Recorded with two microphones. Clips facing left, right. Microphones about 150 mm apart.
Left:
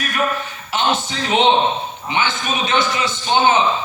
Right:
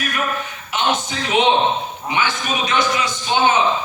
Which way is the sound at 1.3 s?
30° left (ahead or behind).